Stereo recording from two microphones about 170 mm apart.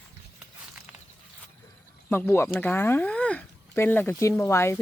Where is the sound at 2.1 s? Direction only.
15° left (ahead or behind).